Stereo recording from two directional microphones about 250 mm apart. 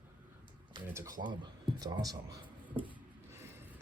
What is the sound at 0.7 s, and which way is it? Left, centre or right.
A man's voice, centre.